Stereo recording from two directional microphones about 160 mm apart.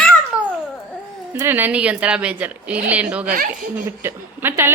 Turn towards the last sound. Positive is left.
turn(degrees=-15)  # may be behind; listen again after turning